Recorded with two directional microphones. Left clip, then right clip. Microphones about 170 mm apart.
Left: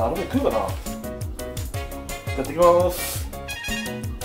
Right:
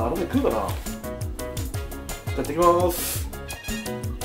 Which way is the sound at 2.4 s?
20° right (ahead or behind).